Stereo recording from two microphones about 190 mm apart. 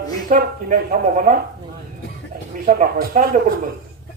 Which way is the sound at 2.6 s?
45° right (ahead or behind).